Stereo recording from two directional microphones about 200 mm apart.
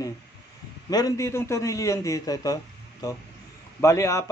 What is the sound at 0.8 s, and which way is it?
Speech, 20° left (ahead or behind).